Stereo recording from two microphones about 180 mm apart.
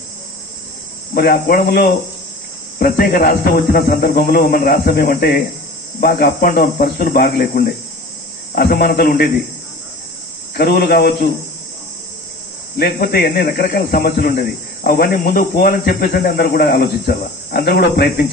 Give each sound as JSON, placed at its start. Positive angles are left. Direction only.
{"t": 1.1, "sound": "speech", "side_deg": 55}
{"t": 2.8, "sound": "speech", "side_deg": 50}
{"t": 10.5, "sound": "speech", "side_deg": 60}
{"t": 12.7, "sound": "speech", "side_deg": 60}